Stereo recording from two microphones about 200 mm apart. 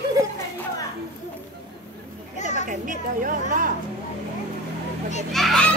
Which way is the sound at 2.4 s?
35° left (ahead or behind).